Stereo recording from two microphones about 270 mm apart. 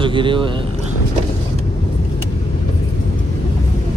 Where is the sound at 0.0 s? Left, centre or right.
Centre.